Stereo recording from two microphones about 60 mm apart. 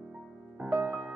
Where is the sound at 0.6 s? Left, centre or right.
Centre.